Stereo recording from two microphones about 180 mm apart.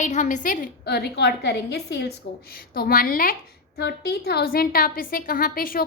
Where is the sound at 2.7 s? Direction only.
55° left (ahead or behind).